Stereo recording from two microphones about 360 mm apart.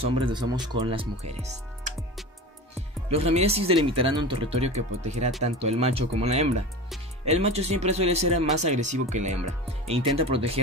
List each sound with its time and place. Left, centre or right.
0.0 s speech: centre
3.1 s speech: centre